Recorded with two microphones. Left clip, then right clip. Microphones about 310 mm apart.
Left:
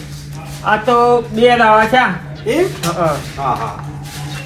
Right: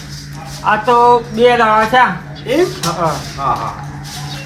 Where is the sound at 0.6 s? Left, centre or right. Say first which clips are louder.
Right 2 dB; centre.